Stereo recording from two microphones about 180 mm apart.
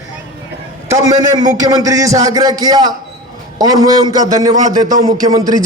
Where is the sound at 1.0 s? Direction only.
20° right (ahead or behind).